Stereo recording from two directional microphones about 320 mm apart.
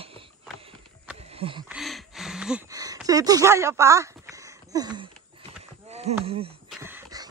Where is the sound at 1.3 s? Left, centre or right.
Centre.